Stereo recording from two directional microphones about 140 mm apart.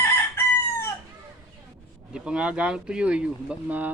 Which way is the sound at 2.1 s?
5° right (ahead or behind).